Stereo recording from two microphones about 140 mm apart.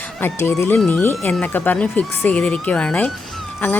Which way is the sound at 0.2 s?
15° left (ahead or behind).